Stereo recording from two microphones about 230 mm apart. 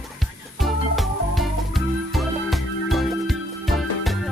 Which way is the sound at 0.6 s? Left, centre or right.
Centre.